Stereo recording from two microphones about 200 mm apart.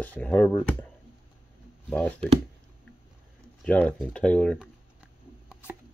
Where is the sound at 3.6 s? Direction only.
5° left (ahead or behind).